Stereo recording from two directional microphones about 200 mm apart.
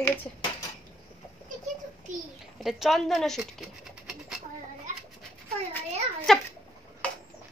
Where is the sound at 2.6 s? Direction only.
Centre (ahead or behind).